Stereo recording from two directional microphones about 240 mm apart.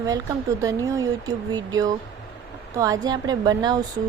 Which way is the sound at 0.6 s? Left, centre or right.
Centre.